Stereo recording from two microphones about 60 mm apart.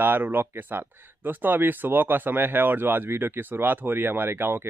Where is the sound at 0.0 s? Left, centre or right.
Right.